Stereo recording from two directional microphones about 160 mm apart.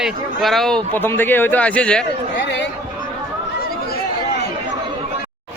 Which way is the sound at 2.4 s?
90° left.